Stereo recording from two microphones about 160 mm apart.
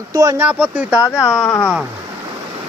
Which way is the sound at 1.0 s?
20° left (ahead or behind).